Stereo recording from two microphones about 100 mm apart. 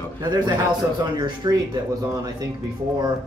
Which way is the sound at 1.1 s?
40° right (ahead or behind).